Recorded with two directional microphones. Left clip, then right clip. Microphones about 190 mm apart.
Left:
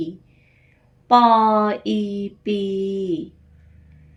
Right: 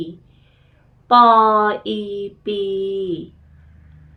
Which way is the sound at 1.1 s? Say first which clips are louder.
Right 3 dB; 40° left (ahead or behind).